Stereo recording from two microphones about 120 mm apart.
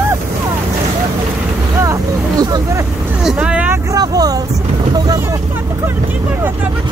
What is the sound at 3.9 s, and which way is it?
Vehicle, 30° right (ahead or behind).